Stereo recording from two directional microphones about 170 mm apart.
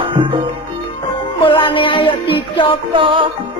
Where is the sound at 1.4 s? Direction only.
30° left (ahead or behind).